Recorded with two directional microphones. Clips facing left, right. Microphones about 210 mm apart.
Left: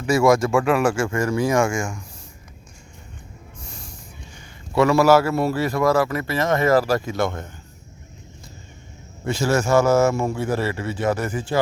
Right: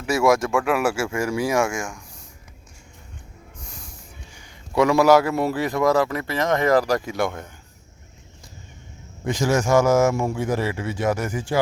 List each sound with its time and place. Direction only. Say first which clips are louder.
0.0 s speech: left 2 dB; 5° right (ahead or behind)
4.8 s a man's voice: even; 15° right (ahead or behind)
9.2 s a man's voice: even; 15° right (ahead or behind)